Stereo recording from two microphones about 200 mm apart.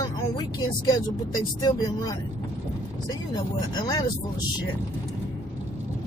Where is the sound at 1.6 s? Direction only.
20° left (ahead or behind).